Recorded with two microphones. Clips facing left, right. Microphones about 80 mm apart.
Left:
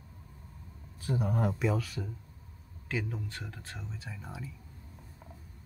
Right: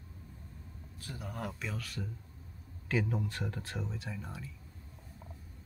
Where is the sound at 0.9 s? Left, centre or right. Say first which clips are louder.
Left 11 dB; left.